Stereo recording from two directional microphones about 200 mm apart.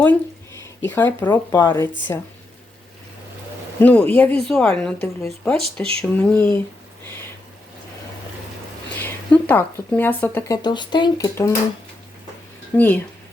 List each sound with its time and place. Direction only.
0.6 s a woman's voice: 10° left (ahead or behind)
3.8 s a woman's voice: 10° left (ahead or behind)
9.0 s speech: 10° left (ahead or behind)
10.6 s speech: 20° left (ahead or behind)
12.7 s a woman's voice: 10° left (ahead or behind)